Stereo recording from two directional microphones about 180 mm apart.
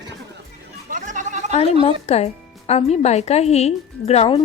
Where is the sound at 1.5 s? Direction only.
35° left (ahead or behind).